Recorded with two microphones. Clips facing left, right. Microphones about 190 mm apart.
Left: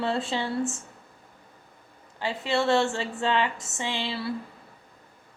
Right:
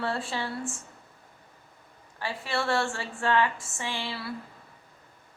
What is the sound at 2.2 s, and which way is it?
A woman's voice, 20° left (ahead or behind).